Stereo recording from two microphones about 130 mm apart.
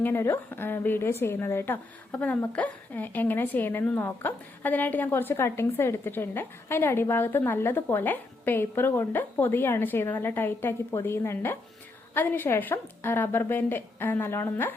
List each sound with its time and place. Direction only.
0.0 s a woman's voice: 20° left (ahead or behind)